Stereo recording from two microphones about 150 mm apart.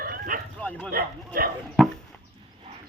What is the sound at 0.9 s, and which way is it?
Speech, 85° right.